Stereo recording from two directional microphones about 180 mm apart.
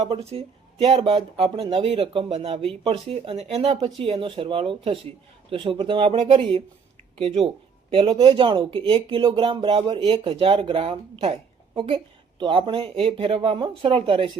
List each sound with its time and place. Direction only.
0.0 s speech: 35° right (ahead or behind)